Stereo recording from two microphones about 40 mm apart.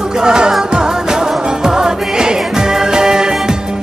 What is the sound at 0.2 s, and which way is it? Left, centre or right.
Music, centre.